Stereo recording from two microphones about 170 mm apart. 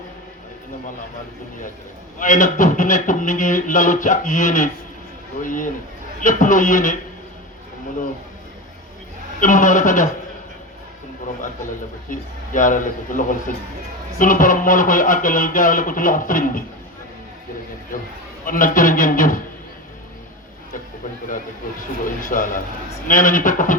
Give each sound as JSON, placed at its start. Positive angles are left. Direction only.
{"t": 2.1, "sound": "speech", "side_deg": 50}
{"t": 9.4, "sound": "speech", "side_deg": 50}
{"t": 12.1, "sound": "speech", "side_deg": 50}
{"t": 18.4, "sound": "speech", "side_deg": 55}
{"t": 22.0, "sound": "speech", "side_deg": 50}